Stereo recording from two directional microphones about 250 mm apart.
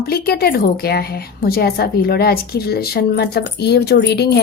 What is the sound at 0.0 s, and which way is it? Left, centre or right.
A woman's voice, left.